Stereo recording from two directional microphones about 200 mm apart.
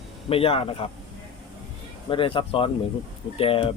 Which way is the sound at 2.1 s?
25° left (ahead or behind).